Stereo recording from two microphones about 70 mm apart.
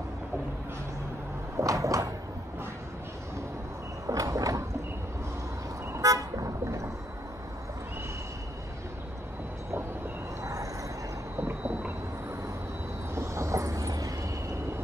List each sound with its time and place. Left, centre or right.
1.6 s a sound: right
4.1 s a sound: right
5.9 s toot: right
10.4 s vehicle: right
11.3 s vehicle: right
13.1 s vehicle: right